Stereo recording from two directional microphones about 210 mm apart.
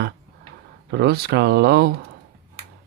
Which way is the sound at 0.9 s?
50° right (ahead or behind).